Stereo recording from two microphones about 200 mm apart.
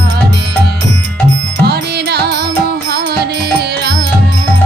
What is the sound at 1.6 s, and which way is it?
Music, 55° right (ahead or behind).